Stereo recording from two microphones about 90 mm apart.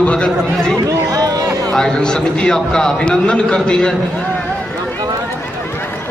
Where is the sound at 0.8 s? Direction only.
40° right (ahead or behind).